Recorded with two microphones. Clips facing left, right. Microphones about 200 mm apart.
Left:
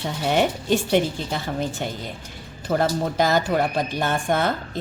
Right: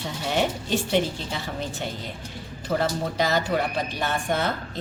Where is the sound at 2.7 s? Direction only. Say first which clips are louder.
Left 3 dB; 50° left (ahead or behind).